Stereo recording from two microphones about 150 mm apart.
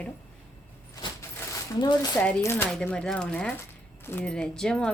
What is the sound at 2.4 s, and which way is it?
Speech, 15° left (ahead or behind).